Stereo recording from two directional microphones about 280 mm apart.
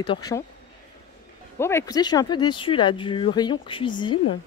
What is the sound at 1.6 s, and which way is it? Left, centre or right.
Speech, centre.